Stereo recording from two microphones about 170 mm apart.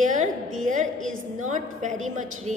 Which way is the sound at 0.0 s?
45° right (ahead or behind).